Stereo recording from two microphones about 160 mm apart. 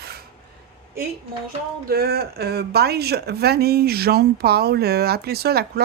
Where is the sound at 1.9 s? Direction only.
75° right (ahead or behind).